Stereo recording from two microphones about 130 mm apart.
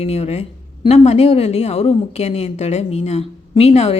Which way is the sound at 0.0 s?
55° left (ahead or behind).